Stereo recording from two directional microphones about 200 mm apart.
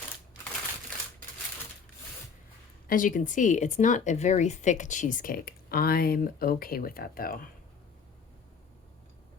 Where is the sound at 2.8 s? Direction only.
40° left (ahead or behind).